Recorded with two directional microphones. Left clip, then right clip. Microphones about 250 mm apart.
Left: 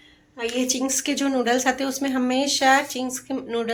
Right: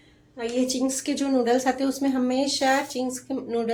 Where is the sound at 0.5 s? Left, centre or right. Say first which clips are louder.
Left 1 dB; centre.